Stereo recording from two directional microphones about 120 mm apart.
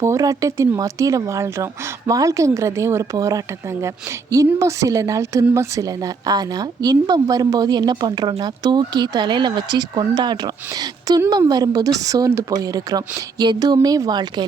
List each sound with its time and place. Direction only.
0.0 s a woman's voice: 25° right (ahead or behind)